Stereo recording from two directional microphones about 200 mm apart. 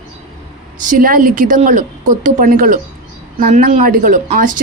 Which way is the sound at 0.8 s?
45° right (ahead or behind).